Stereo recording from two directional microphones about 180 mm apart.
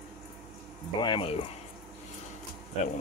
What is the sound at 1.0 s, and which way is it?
Speech, 30° left (ahead or behind).